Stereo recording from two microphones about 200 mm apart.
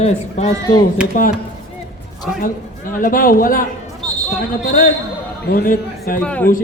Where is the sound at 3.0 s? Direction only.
45° left (ahead or behind).